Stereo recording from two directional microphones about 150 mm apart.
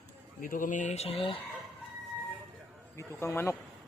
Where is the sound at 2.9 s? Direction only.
20° left (ahead or behind).